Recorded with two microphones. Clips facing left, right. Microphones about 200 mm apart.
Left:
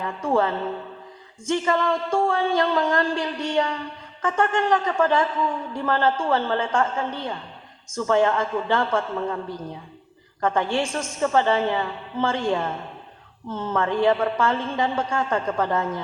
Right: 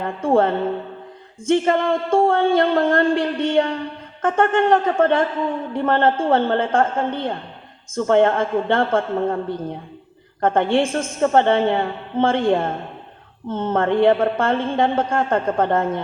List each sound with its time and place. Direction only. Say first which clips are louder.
0.3 s a woman's voice: right 5 dB; 55° right (ahead or behind)
9.5 s a woman's voice: right 6 dB; 25° right (ahead or behind)
10.4 s a woman's voice: right 5 dB; 55° right (ahead or behind)